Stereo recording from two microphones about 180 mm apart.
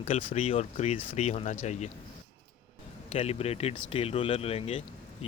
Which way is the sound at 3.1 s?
35° left (ahead or behind).